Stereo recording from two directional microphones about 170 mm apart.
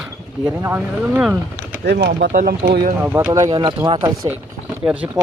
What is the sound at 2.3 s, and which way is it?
Speech, 55° right (ahead or behind).